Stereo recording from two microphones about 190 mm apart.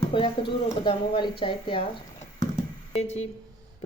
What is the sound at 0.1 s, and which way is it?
Speech, 25° left (ahead or behind).